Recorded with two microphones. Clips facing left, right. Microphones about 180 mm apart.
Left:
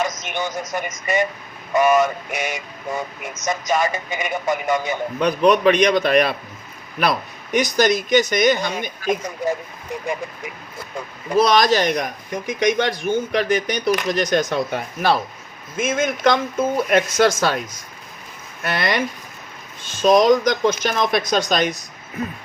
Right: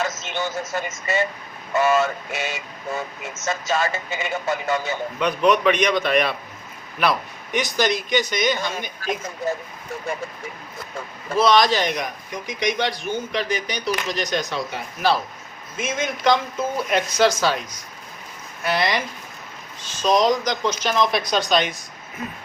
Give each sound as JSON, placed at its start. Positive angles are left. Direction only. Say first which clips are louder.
{"t": 0.0, "sound": "speech", "louder": "left 2 dB", "side_deg": 15}
{"t": 5.2, "sound": "a man's voice", "louder": "left 3 dB", "side_deg": 35}
{"t": 8.5, "sound": "speech", "louder": "left 3 dB", "side_deg": 15}
{"t": 11.3, "sound": "speech", "louder": "left 2 dB", "side_deg": 40}
{"t": 18.6, "sound": "speech", "louder": "left 1 dB", "side_deg": 55}